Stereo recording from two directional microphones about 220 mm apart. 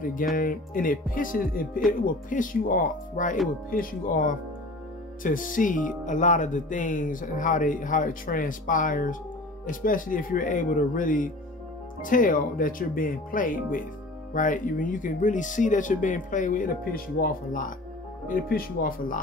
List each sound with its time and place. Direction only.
0.0 s speech: 40° left (ahead or behind)